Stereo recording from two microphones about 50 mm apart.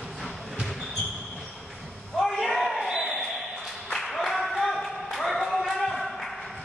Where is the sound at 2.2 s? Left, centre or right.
Centre.